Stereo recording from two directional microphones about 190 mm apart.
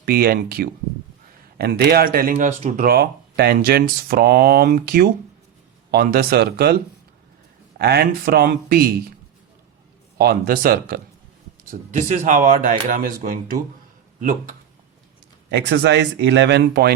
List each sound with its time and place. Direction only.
0.0 s a man's voice: 55° right (ahead or behind)
10.2 s speech: 55° right (ahead or behind)
11.7 s speech: 40° right (ahead or behind)
15.4 s a man's voice: 65° right (ahead or behind)